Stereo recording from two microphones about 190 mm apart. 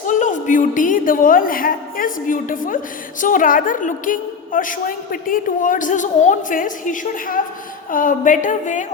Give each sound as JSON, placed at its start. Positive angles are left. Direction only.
{"t": 0.1, "sound": "a woman's voice", "side_deg": 40}